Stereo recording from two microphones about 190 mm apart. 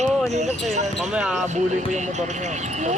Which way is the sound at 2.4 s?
40° right (ahead or behind).